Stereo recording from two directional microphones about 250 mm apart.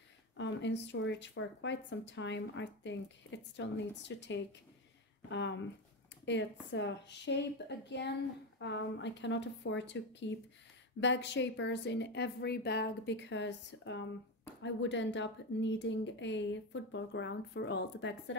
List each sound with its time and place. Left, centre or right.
0.4 s a woman's voice: left